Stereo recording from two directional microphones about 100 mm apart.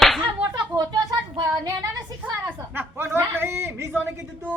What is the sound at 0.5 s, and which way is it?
A man's voice, 45° right (ahead or behind).